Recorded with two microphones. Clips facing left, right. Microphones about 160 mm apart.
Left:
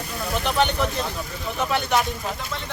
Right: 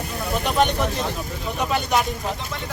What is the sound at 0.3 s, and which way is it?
Speech, centre (ahead or behind).